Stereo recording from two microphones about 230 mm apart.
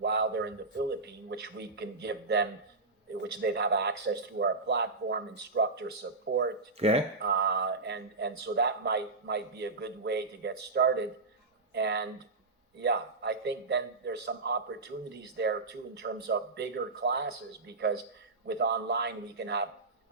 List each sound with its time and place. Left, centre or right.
0.0 s a man's voice: right
6.7 s speech: right
7.2 s a man's voice: right